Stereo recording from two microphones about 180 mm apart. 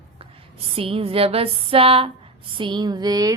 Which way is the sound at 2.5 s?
25° right (ahead or behind).